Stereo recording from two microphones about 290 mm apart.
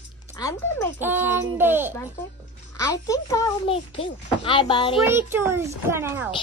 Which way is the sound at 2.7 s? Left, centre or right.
Centre.